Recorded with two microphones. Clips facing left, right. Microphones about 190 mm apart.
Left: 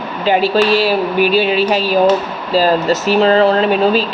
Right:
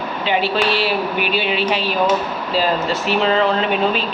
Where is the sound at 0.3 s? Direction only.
40° left (ahead or behind).